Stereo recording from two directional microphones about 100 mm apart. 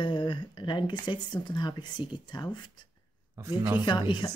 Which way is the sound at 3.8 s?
50° left (ahead or behind).